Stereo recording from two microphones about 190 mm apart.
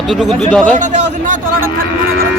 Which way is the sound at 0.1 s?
Centre (ahead or behind).